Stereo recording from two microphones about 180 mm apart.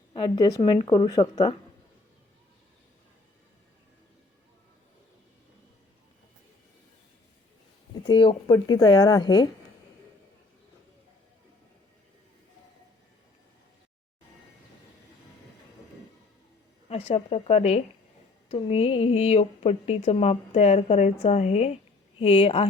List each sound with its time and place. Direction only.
0.1 s a woman's voice: 25° left (ahead or behind)
8.0 s a woman's voice: 25° left (ahead or behind)
16.9 s speech: 35° left (ahead or behind)